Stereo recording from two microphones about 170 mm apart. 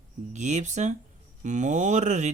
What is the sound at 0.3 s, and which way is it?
Speech, 45° right (ahead or behind).